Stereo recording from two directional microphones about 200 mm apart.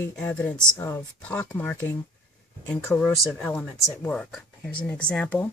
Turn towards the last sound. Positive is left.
turn(degrees=5)  # may be behind; listen again after turning